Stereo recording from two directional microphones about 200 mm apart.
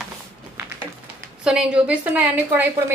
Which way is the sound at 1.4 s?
5° right (ahead or behind).